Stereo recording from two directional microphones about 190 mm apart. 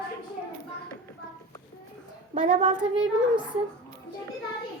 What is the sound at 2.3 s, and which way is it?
Speech, 40° right (ahead or behind).